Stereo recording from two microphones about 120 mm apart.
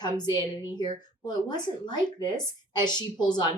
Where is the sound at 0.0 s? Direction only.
35° left (ahead or behind).